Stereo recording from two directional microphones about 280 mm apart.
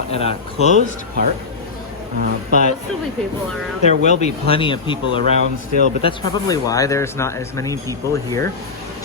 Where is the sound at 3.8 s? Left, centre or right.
Left.